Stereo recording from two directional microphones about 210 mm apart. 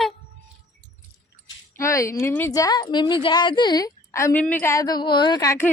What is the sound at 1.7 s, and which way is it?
A woman's voice, 15° left (ahead or behind).